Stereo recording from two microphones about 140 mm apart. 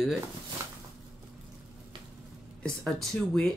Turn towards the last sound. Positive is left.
turn(degrees=0)  # may be behind; listen again after turning